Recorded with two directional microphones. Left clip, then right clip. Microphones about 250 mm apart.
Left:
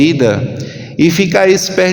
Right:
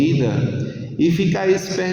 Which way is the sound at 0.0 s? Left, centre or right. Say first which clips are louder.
Left 9 dB; left.